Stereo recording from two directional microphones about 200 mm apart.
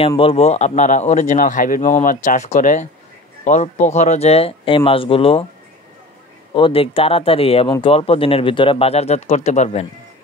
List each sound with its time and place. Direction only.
0.2 s speech: 30° left (ahead or behind)
6.5 s speech: 25° left (ahead or behind)